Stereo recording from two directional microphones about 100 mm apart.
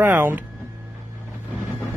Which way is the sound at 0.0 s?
20° right (ahead or behind).